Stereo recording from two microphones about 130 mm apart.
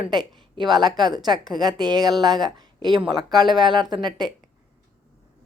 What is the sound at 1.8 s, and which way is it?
A woman's voice, 30° right (ahead or behind).